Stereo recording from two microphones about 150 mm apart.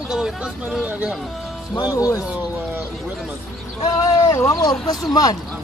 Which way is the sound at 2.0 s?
20° left (ahead or behind).